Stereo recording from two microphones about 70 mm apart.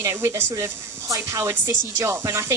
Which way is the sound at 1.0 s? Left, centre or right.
Right.